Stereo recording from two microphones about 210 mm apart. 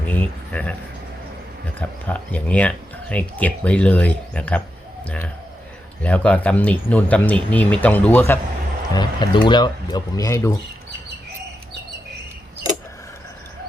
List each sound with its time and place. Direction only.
0.0 s speech: 10° left (ahead or behind)
1.8 s speech: 5° left (ahead or behind)
8.9 s speech: 20° left (ahead or behind)